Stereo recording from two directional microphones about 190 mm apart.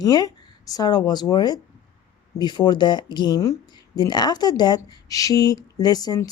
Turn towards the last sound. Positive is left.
turn(degrees=20)  # may be behind; listen again after turning